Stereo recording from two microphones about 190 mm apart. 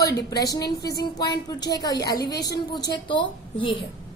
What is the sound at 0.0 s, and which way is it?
A woman's voice, 20° left (ahead or behind).